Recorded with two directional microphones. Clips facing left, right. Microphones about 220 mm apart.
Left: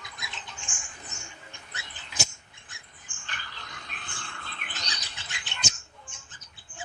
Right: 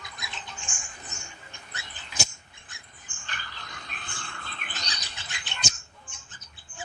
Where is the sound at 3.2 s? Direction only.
40° right (ahead or behind).